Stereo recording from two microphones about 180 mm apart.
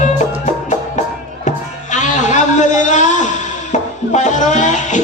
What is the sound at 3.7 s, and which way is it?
Music, 40° left (ahead or behind).